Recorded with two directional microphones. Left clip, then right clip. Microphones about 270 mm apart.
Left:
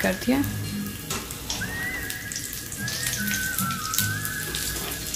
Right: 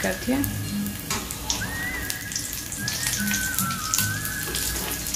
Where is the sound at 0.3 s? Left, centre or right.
Left.